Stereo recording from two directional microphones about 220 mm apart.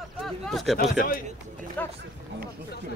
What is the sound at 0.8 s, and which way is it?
Speech, 40° left (ahead or behind).